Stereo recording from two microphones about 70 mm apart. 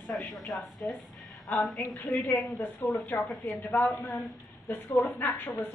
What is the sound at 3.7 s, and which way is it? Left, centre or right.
A woman's voice, left.